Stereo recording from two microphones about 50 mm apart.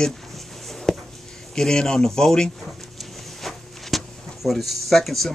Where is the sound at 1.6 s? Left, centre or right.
Centre.